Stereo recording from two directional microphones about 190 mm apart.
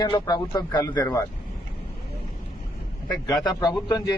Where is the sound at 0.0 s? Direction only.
20° left (ahead or behind).